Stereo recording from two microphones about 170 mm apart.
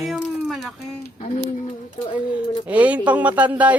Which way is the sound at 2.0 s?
30° left (ahead or behind).